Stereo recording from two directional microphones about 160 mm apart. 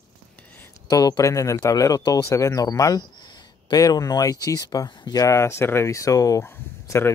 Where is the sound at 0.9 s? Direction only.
20° left (ahead or behind).